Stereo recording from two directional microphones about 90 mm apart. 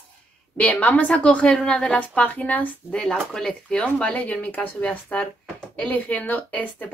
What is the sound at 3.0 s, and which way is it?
Speech, 5° left (ahead or behind).